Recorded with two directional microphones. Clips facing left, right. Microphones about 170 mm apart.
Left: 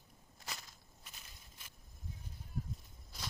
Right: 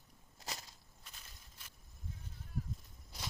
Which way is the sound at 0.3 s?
30° right (ahead or behind).